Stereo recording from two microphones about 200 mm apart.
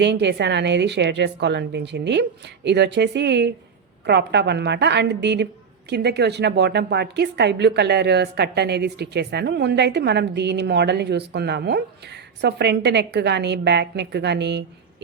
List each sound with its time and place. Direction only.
0.0 s a woman's voice: 60° right (ahead or behind)